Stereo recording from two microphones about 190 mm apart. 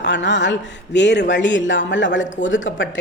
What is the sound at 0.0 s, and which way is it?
A man's voice, 70° left (ahead or behind).